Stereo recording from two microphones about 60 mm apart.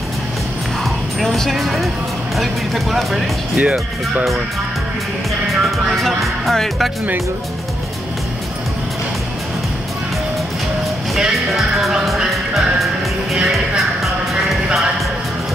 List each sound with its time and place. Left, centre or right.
1.2 s speech: centre
2.3 s music: centre
5.5 s music: centre
11.1 s music: centre